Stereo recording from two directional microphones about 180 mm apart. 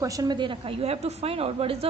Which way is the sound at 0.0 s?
20° right (ahead or behind).